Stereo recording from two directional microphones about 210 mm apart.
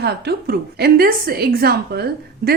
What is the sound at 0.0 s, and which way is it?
A woman's voice, 50° right (ahead or behind).